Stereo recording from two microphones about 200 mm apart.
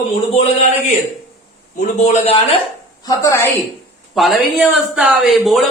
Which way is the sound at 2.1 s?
30° left (ahead or behind).